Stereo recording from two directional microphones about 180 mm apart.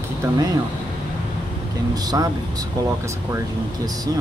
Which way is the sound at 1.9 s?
20° right (ahead or behind).